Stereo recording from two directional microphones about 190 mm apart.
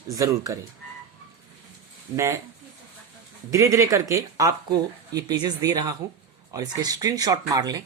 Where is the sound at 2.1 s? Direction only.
15° right (ahead or behind).